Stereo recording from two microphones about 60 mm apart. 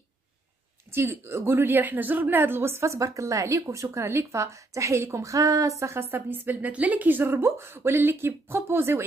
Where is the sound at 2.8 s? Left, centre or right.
Right.